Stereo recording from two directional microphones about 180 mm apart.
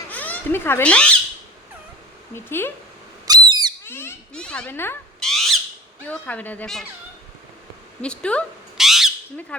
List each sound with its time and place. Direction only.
0.1 s speech: 10° left (ahead or behind)
2.3 s speech: 10° left (ahead or behind)
3.2 s bird: 20° right (ahead or behind)
3.8 s speech: 15° left (ahead or behind)
5.3 s bird: centre (ahead or behind)
6.1 s speech: 10° left (ahead or behind)
8.0 s squawk: 5° left (ahead or behind)
9.5 s speech: 5° left (ahead or behind)